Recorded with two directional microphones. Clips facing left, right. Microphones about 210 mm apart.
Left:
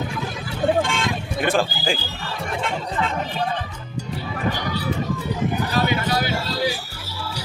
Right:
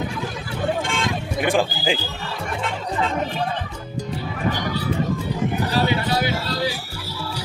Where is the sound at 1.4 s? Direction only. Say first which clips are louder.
Right 1 dB; 15° right (ahead or behind).